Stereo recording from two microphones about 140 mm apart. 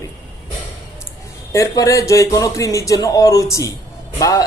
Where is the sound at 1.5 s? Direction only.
25° left (ahead or behind).